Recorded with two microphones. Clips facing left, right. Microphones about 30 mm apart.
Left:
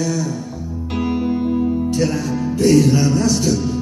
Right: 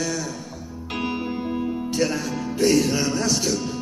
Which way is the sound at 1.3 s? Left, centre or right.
Centre.